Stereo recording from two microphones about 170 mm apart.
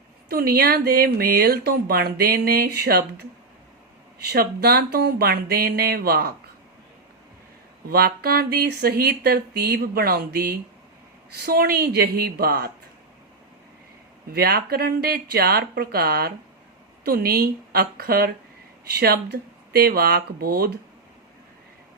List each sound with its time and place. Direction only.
0.3 s speech: 65° right (ahead or behind)
4.2 s speech: 65° right (ahead or behind)
7.9 s speech: 65° right (ahead or behind)
14.3 s speech: 65° right (ahead or behind)